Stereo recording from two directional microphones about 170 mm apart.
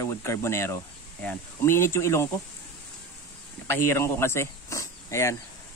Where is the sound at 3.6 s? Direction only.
15° left (ahead or behind).